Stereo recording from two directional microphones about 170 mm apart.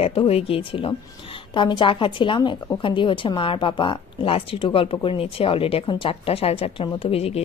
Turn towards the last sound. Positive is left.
turn(degrees=35)  # may be behind; listen again after turning